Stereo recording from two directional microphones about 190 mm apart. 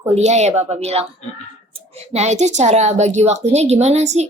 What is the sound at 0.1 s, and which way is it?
A woman's voice, 35° right (ahead or behind).